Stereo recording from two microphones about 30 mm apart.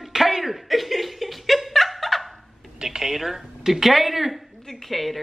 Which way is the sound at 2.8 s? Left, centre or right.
Centre.